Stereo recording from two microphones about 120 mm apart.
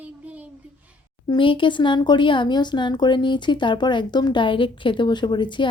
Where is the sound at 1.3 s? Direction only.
45° left (ahead or behind).